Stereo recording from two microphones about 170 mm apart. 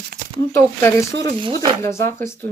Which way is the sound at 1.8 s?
15° left (ahead or behind).